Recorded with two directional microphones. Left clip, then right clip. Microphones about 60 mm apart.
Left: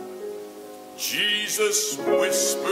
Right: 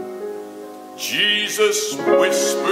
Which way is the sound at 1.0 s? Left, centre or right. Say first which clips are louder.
Right 5 dB; left.